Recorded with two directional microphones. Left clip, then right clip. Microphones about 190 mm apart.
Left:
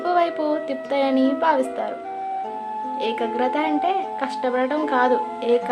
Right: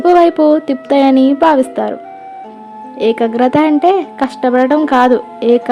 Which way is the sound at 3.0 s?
45° right (ahead or behind).